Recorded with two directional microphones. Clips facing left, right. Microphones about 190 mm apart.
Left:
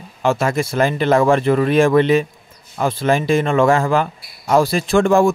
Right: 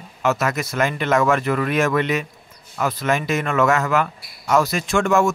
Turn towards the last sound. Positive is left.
turn(degrees=30)  # may be behind; listen again after turning